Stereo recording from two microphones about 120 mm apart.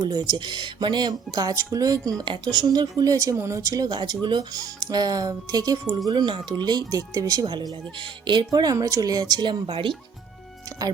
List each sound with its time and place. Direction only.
0.0 s speech: 35° right (ahead or behind)